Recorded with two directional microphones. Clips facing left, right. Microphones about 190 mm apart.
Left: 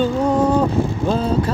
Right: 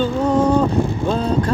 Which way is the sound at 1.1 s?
5° left (ahead or behind).